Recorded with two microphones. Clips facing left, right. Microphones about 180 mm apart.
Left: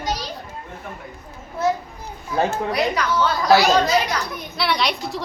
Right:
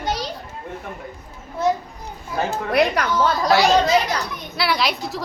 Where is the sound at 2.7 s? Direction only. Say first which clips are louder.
Right 8 dB; 55° right (ahead or behind).